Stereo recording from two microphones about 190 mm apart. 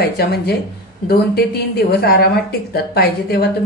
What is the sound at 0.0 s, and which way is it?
A woman's voice, 55° left (ahead or behind).